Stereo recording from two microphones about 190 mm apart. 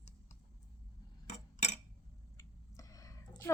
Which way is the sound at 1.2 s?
40° left (ahead or behind).